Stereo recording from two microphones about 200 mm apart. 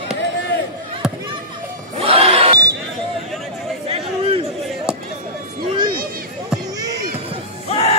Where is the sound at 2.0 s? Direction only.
30° right (ahead or behind).